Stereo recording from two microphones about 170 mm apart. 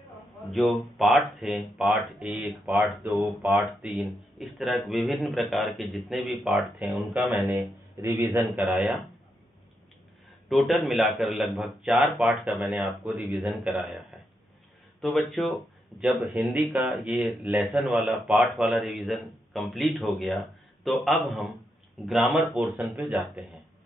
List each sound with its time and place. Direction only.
0.5 s speech: centre (ahead or behind)
7.9 s speech: 15° right (ahead or behind)
8.6 s speech: centre (ahead or behind)
10.5 s speech: centre (ahead or behind)